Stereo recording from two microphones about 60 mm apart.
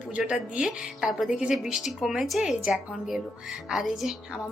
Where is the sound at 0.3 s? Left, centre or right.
Centre.